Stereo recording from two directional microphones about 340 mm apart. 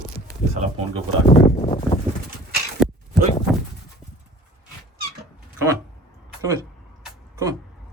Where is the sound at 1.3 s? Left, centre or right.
Centre.